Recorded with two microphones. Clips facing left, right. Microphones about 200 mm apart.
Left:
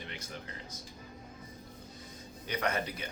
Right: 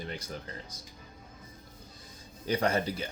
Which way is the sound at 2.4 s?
30° right (ahead or behind).